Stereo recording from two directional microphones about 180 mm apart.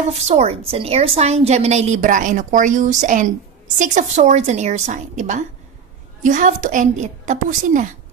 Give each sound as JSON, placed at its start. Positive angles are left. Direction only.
{"t": 0.3, "sound": "a woman's voice", "side_deg": -35}